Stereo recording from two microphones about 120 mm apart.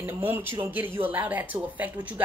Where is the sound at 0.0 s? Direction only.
20° right (ahead or behind).